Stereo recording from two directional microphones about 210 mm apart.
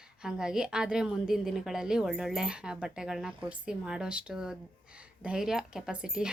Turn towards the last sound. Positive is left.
turn(degrees=-5)  # may be behind; listen again after turning